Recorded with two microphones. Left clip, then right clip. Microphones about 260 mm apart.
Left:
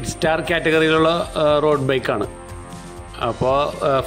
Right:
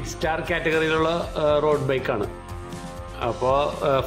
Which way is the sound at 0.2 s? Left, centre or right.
Centre.